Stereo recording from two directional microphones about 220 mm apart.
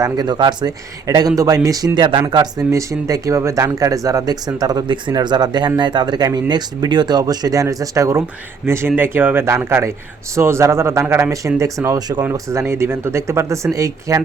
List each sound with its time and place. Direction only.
0.0 s speech: 20° right (ahead or behind)